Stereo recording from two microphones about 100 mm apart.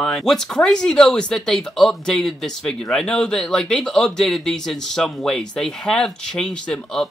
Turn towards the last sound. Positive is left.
turn(degrees=5)  # may be behind; listen again after turning